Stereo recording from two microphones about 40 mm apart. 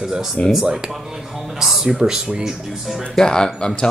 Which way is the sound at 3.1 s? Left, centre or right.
Centre.